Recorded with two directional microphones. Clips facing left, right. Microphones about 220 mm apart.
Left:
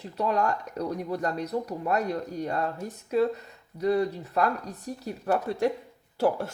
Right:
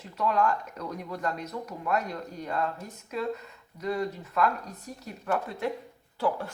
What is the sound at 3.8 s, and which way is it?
Speech, 35° left (ahead or behind).